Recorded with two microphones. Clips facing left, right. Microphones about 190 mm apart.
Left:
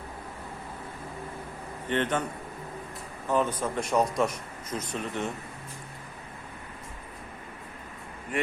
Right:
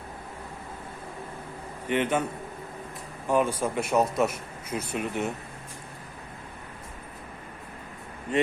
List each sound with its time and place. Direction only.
1.9 s speech: 10° right (ahead or behind)
3.2 s speech: 10° right (ahead or behind)
8.3 s speech: 25° right (ahead or behind)